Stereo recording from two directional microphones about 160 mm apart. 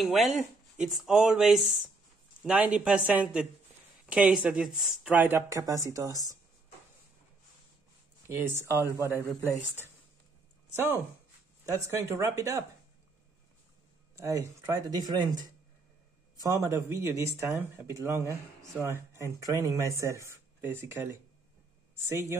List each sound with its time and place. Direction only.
0.0 s speech: centre (ahead or behind); by 6.2 s 20° right (ahead or behind)
8.3 s speech: 15° right (ahead or behind)
11.6 s speech: 20° right (ahead or behind)
14.1 s speech: 20° right (ahead or behind)
16.4 s speech: 20° right (ahead or behind)